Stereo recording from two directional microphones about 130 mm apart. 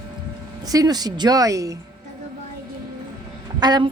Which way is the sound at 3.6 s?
35° right (ahead or behind).